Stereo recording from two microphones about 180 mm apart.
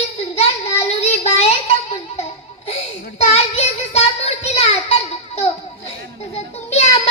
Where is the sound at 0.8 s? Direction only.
35° left (ahead or behind).